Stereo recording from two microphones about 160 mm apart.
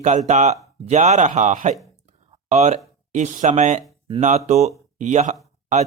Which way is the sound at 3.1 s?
50° right (ahead or behind).